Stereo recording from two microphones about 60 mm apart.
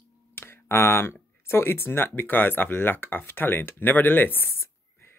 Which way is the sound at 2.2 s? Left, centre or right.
Left.